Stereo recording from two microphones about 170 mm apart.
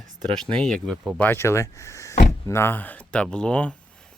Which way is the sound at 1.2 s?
15° left (ahead or behind).